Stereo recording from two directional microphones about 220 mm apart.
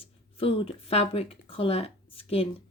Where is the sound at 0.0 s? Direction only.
25° left (ahead or behind).